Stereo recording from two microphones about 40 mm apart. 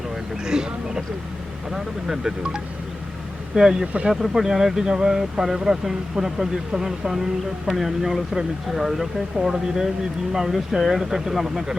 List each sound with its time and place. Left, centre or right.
0.4 s a sound: centre
1.7 s speech: centre
4.1 s speech: centre